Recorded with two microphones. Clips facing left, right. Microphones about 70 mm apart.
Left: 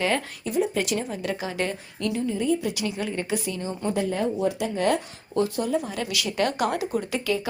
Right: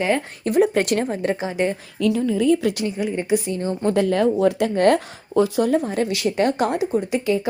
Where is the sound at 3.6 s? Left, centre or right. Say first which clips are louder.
Right 7 dB; right.